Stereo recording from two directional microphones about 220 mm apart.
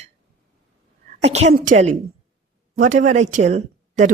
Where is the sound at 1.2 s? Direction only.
30° right (ahead or behind).